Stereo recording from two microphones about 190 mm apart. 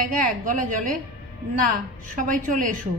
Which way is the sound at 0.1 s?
45° right (ahead or behind).